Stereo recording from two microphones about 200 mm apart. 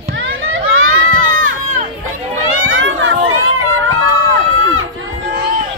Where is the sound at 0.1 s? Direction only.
75° right (ahead or behind).